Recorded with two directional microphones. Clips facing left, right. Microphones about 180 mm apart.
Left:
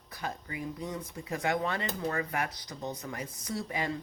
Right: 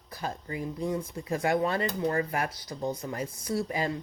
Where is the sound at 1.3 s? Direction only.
30° right (ahead or behind).